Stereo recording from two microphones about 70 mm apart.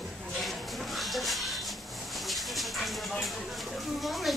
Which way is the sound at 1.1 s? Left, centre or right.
Centre.